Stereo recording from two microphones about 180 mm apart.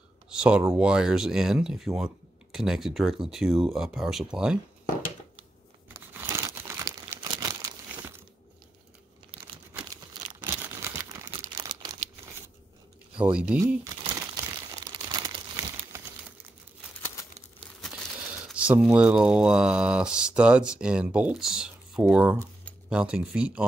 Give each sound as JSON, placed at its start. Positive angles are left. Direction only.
{"t": 0.3, "sound": "speech", "side_deg": -5}
{"t": 5.9, "sound": "crumpling", "side_deg": -15}
{"t": 10.4, "sound": "a sound", "side_deg": -10}
{"t": 11.3, "sound": "crumpling", "side_deg": -25}
{"t": 13.1, "sound": "speech", "side_deg": -5}
{"t": 15.1, "sound": "crumpling", "side_deg": -20}
{"t": 18.5, "sound": "speech", "side_deg": -5}